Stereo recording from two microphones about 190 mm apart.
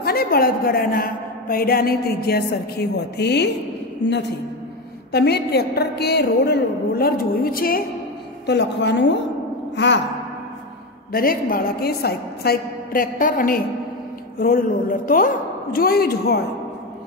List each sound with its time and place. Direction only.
0.0 s a woman's voice: 55° left (ahead or behind)
5.1 s a woman's voice: 60° left (ahead or behind)
8.5 s a woman's voice: 65° left (ahead or behind)
11.1 s a woman's voice: 50° left (ahead or behind)